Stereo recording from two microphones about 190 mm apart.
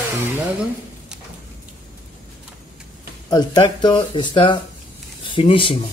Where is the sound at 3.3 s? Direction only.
20° left (ahead or behind).